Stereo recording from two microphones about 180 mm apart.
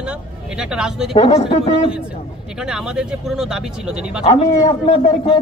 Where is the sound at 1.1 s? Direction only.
35° left (ahead or behind).